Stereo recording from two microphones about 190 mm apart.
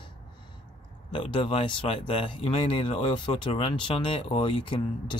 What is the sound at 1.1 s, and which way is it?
Speech, 30° left (ahead or behind).